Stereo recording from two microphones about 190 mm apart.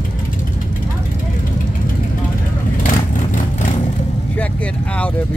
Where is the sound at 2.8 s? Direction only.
45° left (ahead or behind).